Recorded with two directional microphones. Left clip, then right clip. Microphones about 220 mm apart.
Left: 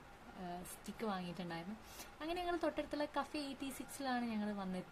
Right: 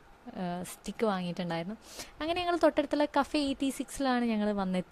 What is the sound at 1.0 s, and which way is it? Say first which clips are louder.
A woman's voice: right 12 dB; 40° right (ahead or behind).